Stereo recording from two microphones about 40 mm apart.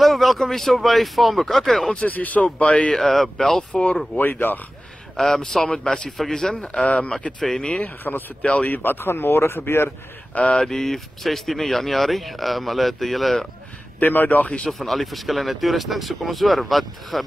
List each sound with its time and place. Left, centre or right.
0.0 s speech: centre
2.0 s speech: left
2.9 s speech: centre
3.7 s speech: left
4.2 s speech: left
5.1 s a man's voice: centre
6.5 s a man's voice: left
7.3 s speech: centre
8.1 s a man's voice: left
8.6 s speech: left
9.8 s a man's voice: left
10.6 s speech: centre
13.9 s speech: left
14.7 s speech: centre